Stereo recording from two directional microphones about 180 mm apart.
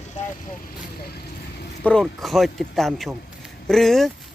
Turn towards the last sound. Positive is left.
turn(degrees=0)  # may be behind; listen again after turning